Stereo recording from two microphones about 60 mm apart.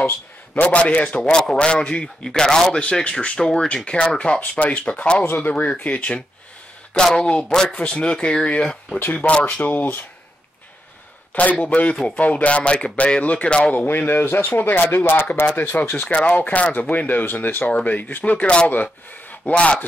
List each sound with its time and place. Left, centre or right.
0.6 s speech: left
5.2 s speech: left
11.6 s speech: left
13.8 s speech: left